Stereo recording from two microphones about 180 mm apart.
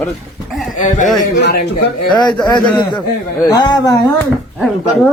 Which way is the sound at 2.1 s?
25° left (ahead or behind).